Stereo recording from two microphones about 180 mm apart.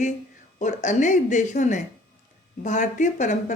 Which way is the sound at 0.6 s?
45° left (ahead or behind).